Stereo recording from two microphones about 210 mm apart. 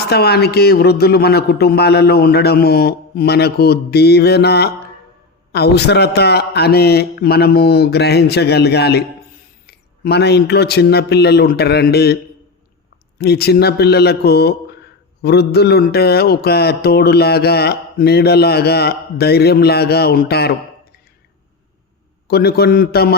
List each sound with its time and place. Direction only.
0.0 s speech: 50° left (ahead or behind)
13.1 s speech: 50° left (ahead or behind)
22.3 s speech: 50° left (ahead or behind)